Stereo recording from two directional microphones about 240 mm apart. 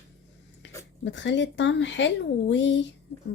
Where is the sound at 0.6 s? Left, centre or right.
Left.